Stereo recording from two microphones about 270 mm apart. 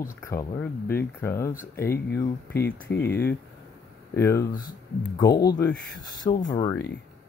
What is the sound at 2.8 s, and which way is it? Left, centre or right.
Speech, left.